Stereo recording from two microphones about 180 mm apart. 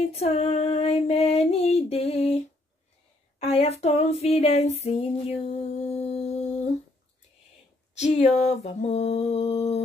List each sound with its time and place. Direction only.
0.0 s female singing: 35° left (ahead or behind)
8.3 s female singing: 40° left (ahead or behind)